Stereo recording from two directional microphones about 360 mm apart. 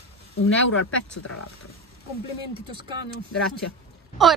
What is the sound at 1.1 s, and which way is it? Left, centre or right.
Speech, left.